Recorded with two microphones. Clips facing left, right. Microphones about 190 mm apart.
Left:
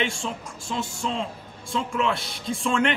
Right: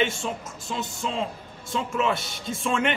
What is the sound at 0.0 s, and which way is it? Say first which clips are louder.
A man's voice: right 2 dB; centre (ahead or behind).